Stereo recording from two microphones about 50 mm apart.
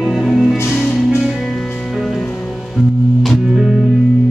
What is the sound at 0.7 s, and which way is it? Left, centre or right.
Music, centre.